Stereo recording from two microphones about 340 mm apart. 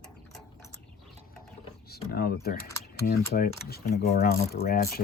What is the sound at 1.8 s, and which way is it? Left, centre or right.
Speech, left.